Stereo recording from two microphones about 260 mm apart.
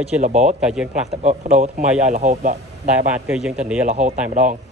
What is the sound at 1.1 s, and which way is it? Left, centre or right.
A man's voice, right.